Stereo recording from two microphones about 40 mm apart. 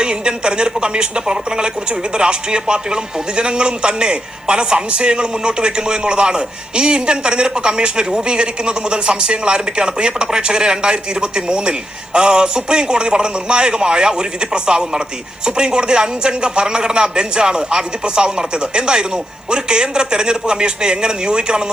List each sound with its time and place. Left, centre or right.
0.0 s a woman's voice: right